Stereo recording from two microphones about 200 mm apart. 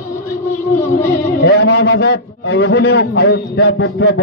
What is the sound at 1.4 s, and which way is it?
A man's voice, 55° left (ahead or behind).